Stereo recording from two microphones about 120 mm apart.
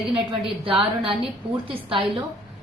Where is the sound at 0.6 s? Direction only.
50° right (ahead or behind).